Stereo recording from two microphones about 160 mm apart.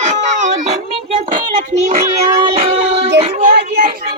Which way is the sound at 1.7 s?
50° right (ahead or behind).